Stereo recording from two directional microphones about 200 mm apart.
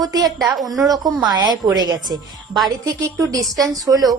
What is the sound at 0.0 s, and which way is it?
Speech, 20° right (ahead or behind).